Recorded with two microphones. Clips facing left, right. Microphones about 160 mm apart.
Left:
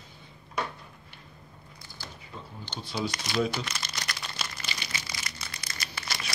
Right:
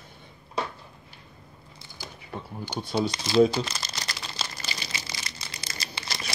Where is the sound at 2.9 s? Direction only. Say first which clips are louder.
Right 8 dB; 30° right (ahead or behind).